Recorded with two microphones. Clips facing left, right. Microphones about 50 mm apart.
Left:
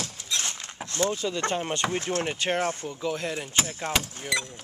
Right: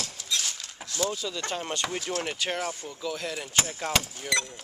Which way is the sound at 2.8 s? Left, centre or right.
Left.